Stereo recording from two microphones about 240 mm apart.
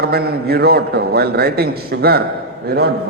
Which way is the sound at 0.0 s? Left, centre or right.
Right.